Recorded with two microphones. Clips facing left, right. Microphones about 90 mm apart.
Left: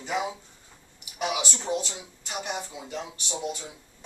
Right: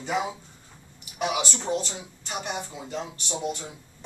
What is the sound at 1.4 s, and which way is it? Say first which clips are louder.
Speech: right 2 dB; 15° right (ahead or behind).